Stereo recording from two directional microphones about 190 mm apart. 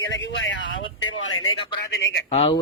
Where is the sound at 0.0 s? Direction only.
75° left (ahead or behind); by 1.5 s 90° left.